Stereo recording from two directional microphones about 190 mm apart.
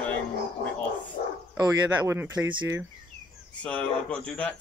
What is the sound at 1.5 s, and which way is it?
Speech, 15° right (ahead or behind).